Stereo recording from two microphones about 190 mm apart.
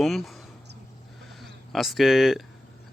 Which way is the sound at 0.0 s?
Centre (ahead or behind).